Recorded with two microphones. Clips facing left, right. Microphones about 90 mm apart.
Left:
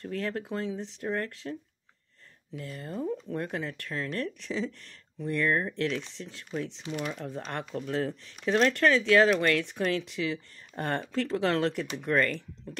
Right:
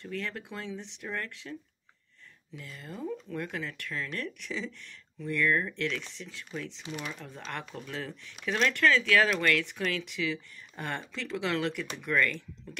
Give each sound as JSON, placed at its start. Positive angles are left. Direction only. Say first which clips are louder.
{"t": 0.0, "sound": "speech", "louder": "left 4 dB", "side_deg": 40}
{"t": 2.6, "sound": "speech", "louder": "left 5 dB", "side_deg": 35}